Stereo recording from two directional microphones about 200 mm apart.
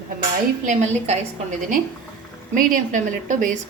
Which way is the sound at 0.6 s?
35° right (ahead or behind).